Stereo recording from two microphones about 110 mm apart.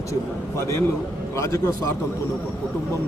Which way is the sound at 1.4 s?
25° left (ahead or behind).